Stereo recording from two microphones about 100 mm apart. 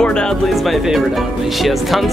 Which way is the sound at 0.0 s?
10° left (ahead or behind).